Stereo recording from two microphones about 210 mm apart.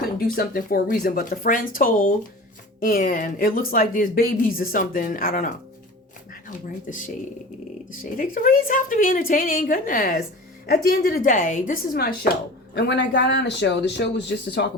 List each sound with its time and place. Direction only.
0.2 s speech: 45° left (ahead or behind)
6.9 s speech: 35° left (ahead or behind)
12.7 s a man's voice: 55° left (ahead or behind)